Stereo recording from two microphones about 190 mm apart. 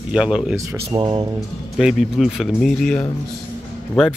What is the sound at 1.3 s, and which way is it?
Speech, centre (ahead or behind).